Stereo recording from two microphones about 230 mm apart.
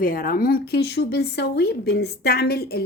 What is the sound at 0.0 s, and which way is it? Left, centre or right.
A woman's voice, left.